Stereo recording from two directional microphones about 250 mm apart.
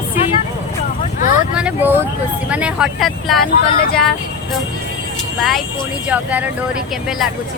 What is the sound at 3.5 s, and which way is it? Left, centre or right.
Speech, left.